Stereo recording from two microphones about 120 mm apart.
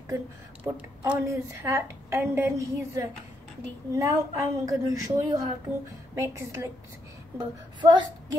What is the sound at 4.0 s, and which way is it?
A woman's voice, 25° right (ahead or behind).